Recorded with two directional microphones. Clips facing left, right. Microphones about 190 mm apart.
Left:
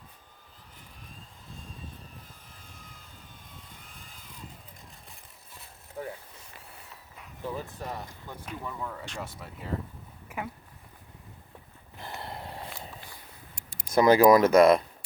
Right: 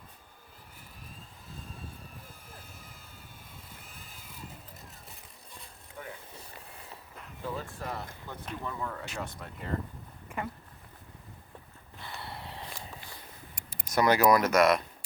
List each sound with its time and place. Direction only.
2.6 s vehicle: 5° right (ahead or behind)
6.0 s vehicle: 35° left (ahead or behind)
7.4 s speech: 15° left (ahead or behind)
10.2 s a sound: 5° left (ahead or behind)
11.9 s snort: 40° left (ahead or behind)
13.9 s speech: 25° left (ahead or behind)